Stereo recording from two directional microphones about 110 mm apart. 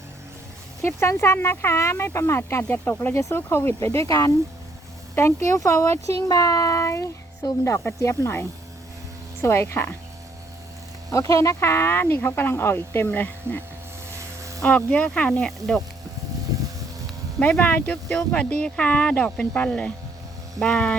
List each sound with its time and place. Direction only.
0.8 s speech: 25° left (ahead or behind)
11.1 s speech: 30° left (ahead or behind); by 13.6 s 15° left (ahead or behind)
14.2 s a sound: 30° right (ahead or behind)
14.6 s speech: 10° left (ahead or behind)
16.5 s a sound: 30° right (ahead or behind)
17.4 s speech: 15° left (ahead or behind)